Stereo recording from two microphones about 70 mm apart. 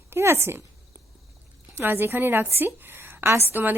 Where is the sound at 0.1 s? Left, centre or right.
Right.